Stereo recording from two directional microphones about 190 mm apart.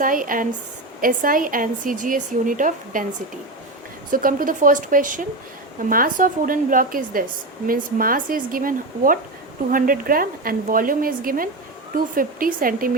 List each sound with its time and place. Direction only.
0.0 s a woman's voice: 45° right (ahead or behind)
4.1 s a woman's voice: 45° right (ahead or behind)